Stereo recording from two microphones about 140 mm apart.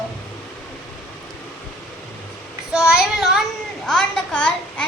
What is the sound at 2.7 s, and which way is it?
A child's voice, 5° right (ahead or behind).